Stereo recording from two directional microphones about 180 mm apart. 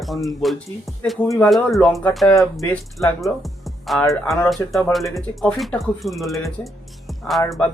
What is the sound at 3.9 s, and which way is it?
A man's voice, centre (ahead or behind).